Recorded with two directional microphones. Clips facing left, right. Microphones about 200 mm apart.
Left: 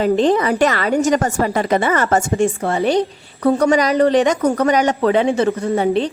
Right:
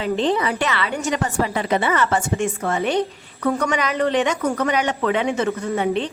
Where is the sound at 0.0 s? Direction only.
45° left (ahead or behind).